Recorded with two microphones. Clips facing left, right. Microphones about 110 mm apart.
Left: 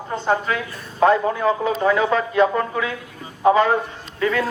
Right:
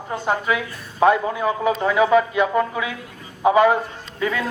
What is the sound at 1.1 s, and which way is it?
A man's voice, 15° right (ahead or behind).